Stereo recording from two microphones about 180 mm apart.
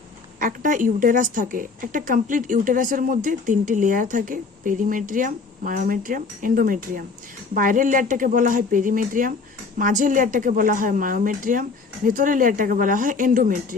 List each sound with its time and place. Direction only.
0.3 s a woman's voice: 45° right (ahead or behind)